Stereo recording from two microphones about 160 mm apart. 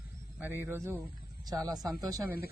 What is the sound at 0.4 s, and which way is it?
Speech, 15° right (ahead or behind).